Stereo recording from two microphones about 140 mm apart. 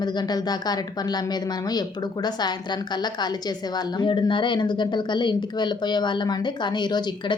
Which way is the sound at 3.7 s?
35° left (ahead or behind).